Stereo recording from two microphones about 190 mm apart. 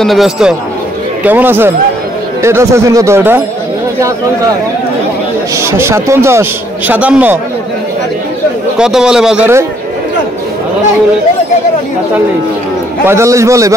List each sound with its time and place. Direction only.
0.0 s a man's voice: centre (ahead or behind)
5.6 s speech: 15° right (ahead or behind)
8.7 s a man's voice: 5° right (ahead or behind)
13.0 s speech: 15° right (ahead or behind)